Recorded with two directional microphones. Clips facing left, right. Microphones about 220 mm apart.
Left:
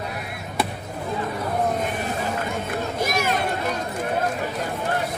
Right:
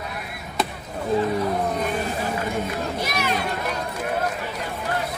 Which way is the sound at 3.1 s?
45° left (ahead or behind).